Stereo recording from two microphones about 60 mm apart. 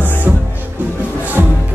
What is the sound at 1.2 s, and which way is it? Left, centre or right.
Music, right.